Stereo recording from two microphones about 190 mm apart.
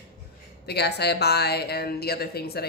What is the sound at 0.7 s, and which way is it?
A man's voice, 60° left (ahead or behind).